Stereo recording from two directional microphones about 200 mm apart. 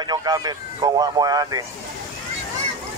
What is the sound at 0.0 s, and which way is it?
Speech, 20° right (ahead or behind).